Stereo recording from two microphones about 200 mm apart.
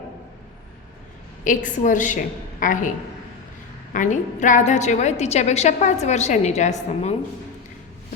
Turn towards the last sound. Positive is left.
turn(degrees=35)  # may be behind; listen again after turning